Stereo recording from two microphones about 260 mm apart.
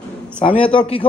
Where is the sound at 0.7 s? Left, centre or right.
Centre.